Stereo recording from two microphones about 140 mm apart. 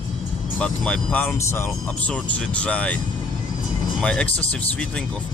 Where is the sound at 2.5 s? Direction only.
10° left (ahead or behind).